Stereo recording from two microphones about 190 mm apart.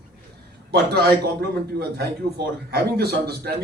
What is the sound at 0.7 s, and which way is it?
Speech, 55° right (ahead or behind).